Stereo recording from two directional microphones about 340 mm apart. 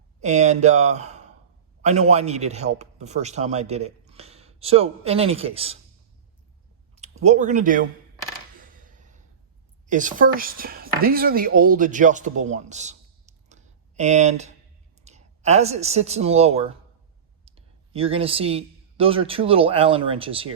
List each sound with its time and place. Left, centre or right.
0.2 s a man's voice: centre
6.9 s speech: centre
8.6 s a sound: right
9.8 s a woman's voice: right